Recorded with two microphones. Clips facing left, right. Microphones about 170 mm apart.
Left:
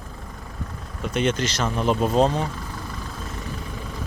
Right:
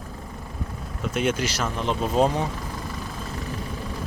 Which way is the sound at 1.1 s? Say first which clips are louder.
Left 2 dB; 5° right (ahead or behind).